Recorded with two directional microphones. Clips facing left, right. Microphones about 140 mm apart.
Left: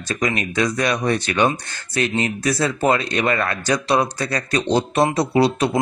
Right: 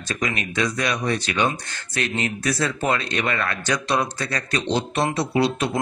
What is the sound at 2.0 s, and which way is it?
Speech, 35° left (ahead or behind).